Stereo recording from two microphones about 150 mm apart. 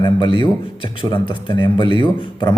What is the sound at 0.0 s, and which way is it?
A man's voice, 30° left (ahead or behind).